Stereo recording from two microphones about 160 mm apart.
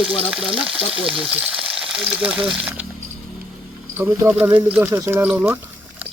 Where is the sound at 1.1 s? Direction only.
5° right (ahead or behind).